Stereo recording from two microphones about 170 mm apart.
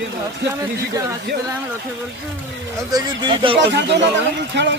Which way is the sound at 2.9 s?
30° right (ahead or behind).